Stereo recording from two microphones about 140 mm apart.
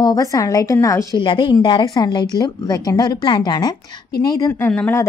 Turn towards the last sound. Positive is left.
turn(degrees=15)  # may be behind; listen again after turning